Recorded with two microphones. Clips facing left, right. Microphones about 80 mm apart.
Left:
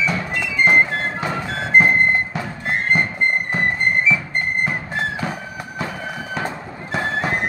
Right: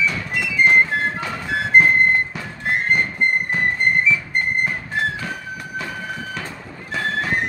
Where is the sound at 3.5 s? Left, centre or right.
Centre.